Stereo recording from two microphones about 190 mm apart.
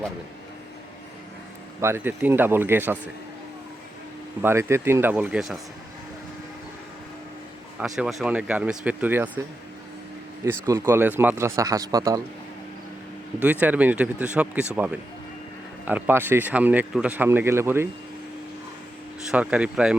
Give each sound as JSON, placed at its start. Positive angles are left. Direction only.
{"t": 1.8, "sound": "speech", "side_deg": -10}
{"t": 4.4, "sound": "speech", "side_deg": -15}
{"t": 7.8, "sound": "speech", "side_deg": -5}
{"t": 10.4, "sound": "speech", "side_deg": -15}
{"t": 13.4, "sound": "speech", "side_deg": -10}
{"t": 15.9, "sound": "speech", "side_deg": -10}
{"t": 19.3, "sound": "speech", "side_deg": -5}